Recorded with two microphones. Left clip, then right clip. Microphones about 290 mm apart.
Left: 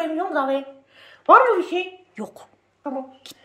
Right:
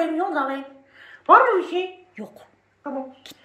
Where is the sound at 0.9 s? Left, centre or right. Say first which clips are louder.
Left 1 dB; left.